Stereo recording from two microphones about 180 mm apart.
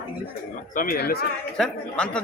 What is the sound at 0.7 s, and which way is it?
Speech, 50° left (ahead or behind).